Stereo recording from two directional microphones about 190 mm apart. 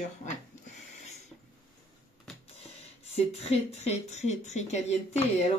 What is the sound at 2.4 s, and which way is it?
Speech, 30° left (ahead or behind).